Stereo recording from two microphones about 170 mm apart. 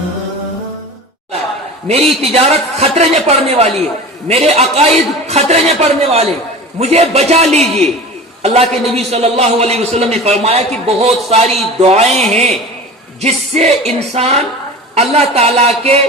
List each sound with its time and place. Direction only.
1.9 s a man's voice: 35° right (ahead or behind)